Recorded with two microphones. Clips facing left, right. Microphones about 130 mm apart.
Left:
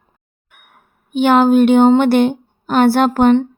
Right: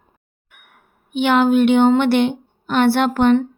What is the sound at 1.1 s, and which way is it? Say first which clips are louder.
Speech: left 4 dB; 40° left (ahead or behind).